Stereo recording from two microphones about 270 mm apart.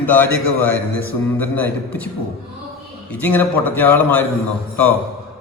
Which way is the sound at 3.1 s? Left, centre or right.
Centre.